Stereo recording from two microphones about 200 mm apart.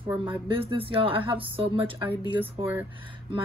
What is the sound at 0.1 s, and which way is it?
Speech, 25° right (ahead or behind).